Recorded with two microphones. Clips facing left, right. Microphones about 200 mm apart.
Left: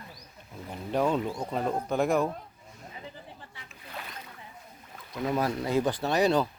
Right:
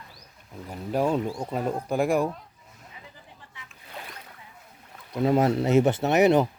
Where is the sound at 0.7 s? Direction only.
5° right (ahead or behind).